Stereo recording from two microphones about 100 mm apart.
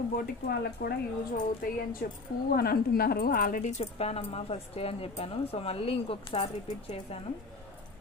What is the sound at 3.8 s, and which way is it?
A woman's voice, 90° left.